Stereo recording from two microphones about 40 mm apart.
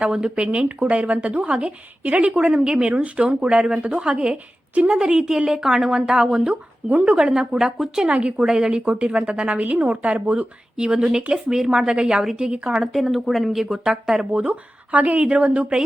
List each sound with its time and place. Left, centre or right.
0.0 s speech: right
2.5 s speech: centre
2.9 s speech: right
3.2 s speech: right
6.5 s speech: right
7.2 s speech: centre
7.9 s speech: right
8.8 s speech: right
9.6 s speech: right; by 12.2 s centre
12.8 s speech: centre
14.3 s speech: right